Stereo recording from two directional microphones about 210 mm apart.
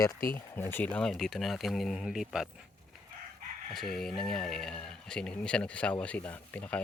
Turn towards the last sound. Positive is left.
turn(degrees=5)  # may be behind; listen again after turning